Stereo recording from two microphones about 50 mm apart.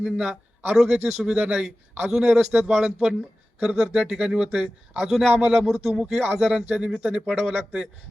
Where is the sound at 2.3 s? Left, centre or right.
Right.